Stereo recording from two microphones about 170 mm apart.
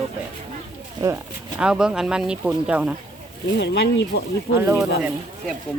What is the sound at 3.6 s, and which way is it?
Speech, 80° left.